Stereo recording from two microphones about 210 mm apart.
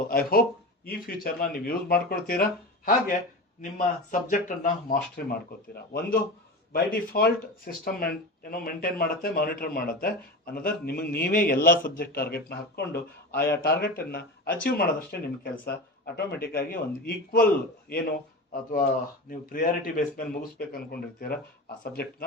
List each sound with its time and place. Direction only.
0.1 s speech: 45° left (ahead or behind)
19.3 s speech: 40° left (ahead or behind)